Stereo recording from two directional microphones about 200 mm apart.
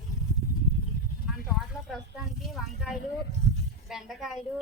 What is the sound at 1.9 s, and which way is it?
A woman's voice, centre (ahead or behind).